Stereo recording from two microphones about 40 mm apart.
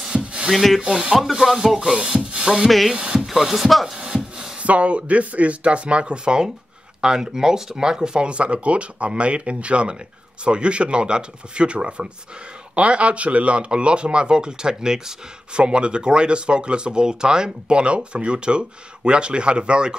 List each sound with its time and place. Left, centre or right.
0.1 s rub: right
0.5 s speech: centre
0.7 s rub: centre
2.9 s speech: centre
3.3 s rub: centre
4.0 s a sound: centre
4.6 s speech: right